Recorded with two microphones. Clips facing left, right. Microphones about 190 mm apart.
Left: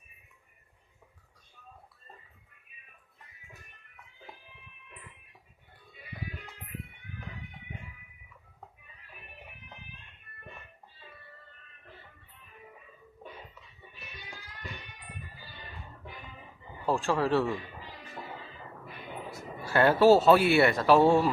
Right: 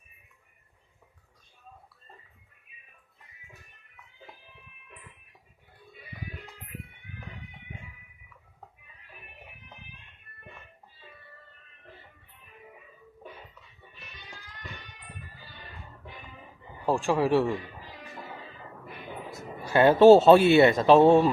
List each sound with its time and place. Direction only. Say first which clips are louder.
16.8 s speech: right 3 dB; 15° right (ahead or behind)
19.3 s speech: right 3 dB; 20° right (ahead or behind)